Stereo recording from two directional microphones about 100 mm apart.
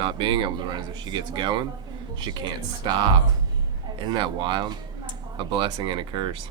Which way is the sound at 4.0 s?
50° right (ahead or behind).